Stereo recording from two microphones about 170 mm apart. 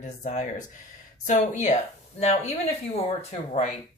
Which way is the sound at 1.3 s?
45° left (ahead or behind).